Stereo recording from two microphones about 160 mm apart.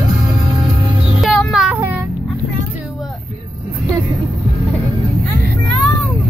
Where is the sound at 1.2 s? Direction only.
Centre (ahead or behind).